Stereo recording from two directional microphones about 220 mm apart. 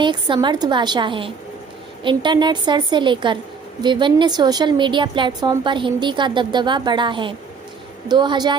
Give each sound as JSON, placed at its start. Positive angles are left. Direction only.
{"t": 0.0, "sound": "a woman's voice", "side_deg": -20}